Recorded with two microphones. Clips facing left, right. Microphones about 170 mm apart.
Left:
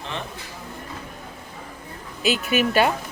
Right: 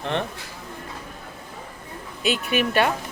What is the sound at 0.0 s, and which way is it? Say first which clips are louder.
Speech: right 6 dB; 60° right (ahead or behind).